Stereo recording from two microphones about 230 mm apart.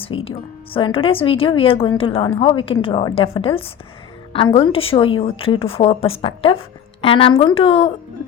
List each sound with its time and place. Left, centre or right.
0.3 s a woman's voice: left